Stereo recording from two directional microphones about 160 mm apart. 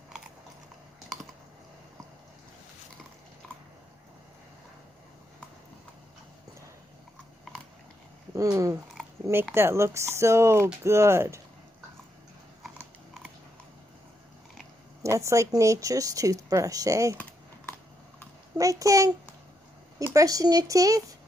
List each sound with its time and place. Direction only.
8.4 s speech: 20° right (ahead or behind)
15.0 s speech: 20° right (ahead or behind)
18.5 s speech: 20° right (ahead or behind)
20.1 s speech: 20° right (ahead or behind)